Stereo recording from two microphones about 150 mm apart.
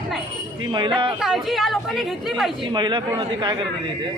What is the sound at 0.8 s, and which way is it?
Speech, 35° right (ahead or behind).